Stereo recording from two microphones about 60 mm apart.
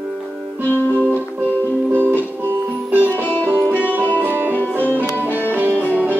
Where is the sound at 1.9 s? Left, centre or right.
Right.